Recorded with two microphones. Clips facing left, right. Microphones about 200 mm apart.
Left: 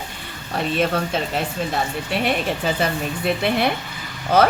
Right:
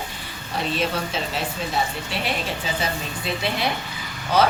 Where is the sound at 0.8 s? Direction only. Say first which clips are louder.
Left 7 dB; 55° left (ahead or behind).